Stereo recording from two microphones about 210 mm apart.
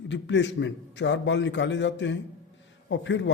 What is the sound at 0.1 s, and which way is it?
A man's voice, 60° left (ahead or behind).